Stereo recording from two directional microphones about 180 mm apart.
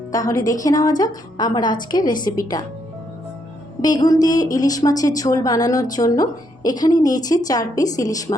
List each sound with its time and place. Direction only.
0.1 s a woman's voice: 20° left (ahead or behind)
3.8 s a woman's voice: 20° left (ahead or behind)